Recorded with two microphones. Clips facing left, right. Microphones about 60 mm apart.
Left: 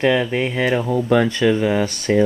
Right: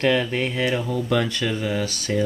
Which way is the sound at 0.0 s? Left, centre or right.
Centre.